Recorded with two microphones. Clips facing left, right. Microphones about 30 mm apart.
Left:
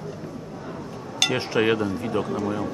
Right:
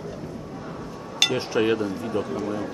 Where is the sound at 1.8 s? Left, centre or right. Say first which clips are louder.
Left 1 dB; centre.